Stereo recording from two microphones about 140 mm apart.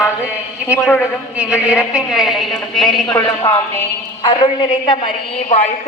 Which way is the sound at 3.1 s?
25° left (ahead or behind).